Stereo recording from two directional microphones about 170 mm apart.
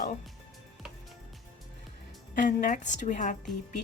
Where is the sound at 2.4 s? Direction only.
50° left (ahead or behind).